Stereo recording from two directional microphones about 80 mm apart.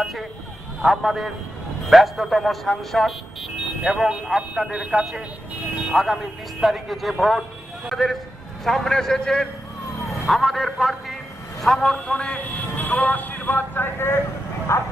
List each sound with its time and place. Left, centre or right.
0.8 s a man's voice: centre; by 14.2 s left
14.7 s vehicle: left